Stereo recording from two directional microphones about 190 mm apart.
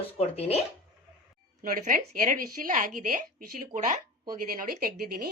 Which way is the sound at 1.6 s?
45° right (ahead or behind).